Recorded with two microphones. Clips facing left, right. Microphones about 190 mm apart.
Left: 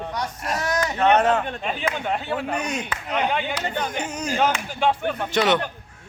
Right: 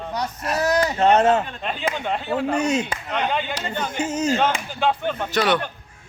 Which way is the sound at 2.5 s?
25° right (ahead or behind).